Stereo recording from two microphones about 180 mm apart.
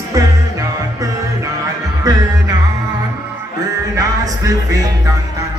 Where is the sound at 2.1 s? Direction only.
20° right (ahead or behind).